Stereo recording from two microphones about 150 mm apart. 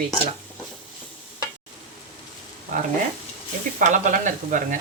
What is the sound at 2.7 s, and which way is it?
Speech, 55° right (ahead or behind).